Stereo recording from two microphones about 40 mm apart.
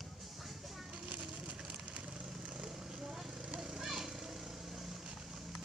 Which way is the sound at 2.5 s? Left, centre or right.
Right.